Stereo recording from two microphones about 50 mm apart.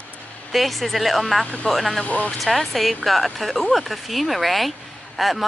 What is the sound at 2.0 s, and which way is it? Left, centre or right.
Speech, left.